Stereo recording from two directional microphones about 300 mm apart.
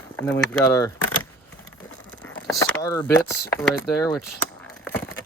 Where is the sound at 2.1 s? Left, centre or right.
Centre.